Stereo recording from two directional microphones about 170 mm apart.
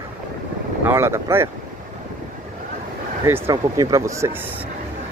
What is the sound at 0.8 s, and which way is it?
Speech, 15° right (ahead or behind).